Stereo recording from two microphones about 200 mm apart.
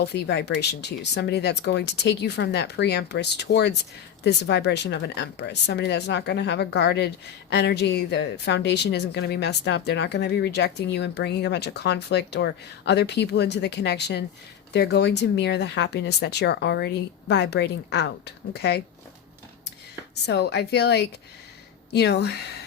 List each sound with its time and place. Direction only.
0.0 s a woman's voice: 55° left (ahead or behind)
20.1 s a woman's voice: 55° left (ahead or behind)